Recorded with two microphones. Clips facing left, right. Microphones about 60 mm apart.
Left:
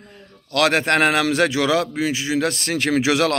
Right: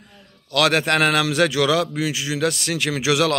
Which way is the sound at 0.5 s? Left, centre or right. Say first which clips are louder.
Left 1 dB; left.